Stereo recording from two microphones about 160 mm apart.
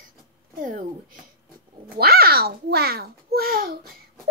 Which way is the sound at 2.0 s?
75° right (ahead or behind).